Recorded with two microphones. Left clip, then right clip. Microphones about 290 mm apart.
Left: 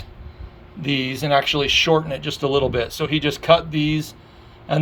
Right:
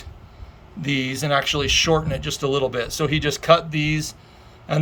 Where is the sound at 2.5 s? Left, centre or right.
Right.